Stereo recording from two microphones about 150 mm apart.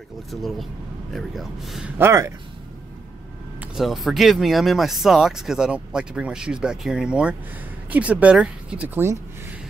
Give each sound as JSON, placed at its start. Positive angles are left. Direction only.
{"t": 0.3, "sound": "speech", "side_deg": 0}
{"t": 2.0, "sound": "speech", "side_deg": -20}
{"t": 3.7, "sound": "speech", "side_deg": 0}